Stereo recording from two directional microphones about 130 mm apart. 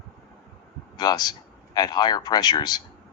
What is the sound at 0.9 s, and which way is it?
A man's voice, 30° left (ahead or behind).